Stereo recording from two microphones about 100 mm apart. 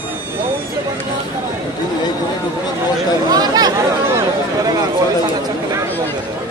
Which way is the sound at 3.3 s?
40° right (ahead or behind).